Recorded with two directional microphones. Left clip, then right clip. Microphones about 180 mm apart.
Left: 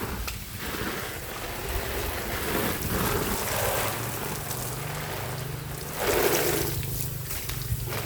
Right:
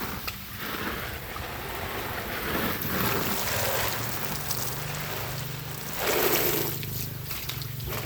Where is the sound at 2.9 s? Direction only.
20° right (ahead or behind).